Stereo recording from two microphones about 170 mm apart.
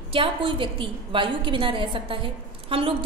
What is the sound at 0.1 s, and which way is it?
A woman's voice, 30° right (ahead or behind).